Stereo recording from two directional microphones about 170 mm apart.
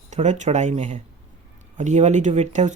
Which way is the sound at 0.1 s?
45° right (ahead or behind).